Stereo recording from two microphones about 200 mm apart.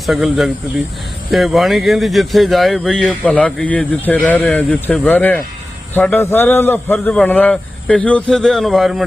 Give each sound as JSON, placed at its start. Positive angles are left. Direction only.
{"t": 0.0, "sound": "a man's voice", "side_deg": 0}